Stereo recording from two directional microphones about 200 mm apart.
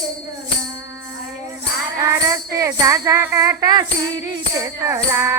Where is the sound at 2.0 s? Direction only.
15° right (ahead or behind).